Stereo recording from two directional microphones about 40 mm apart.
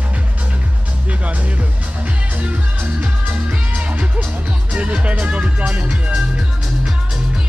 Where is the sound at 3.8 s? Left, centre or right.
Right.